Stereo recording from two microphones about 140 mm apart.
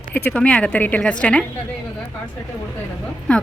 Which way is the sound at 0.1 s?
10° left (ahead or behind).